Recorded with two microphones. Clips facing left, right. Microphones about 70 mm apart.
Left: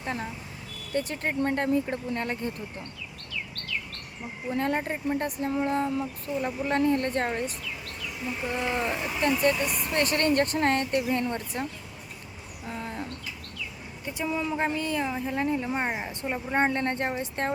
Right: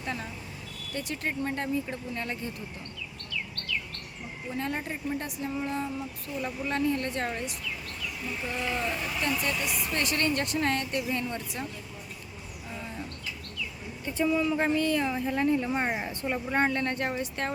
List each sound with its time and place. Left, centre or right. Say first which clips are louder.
0.0 s speech: left 2 dB; left
4.5 s a sound: left 5 dB; left
6.4 s speech: left 3 dB; left
8.3 s speech: left 3 dB; left
9.4 s speech: left 6 dB; left
12.6 s bird: left 4 dB; left
14.1 s a woman's voice: right 3 dB; centre
16.3 s speech: left 1 dB; centre